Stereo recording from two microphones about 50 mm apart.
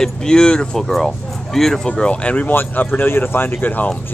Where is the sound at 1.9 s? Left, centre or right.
Left.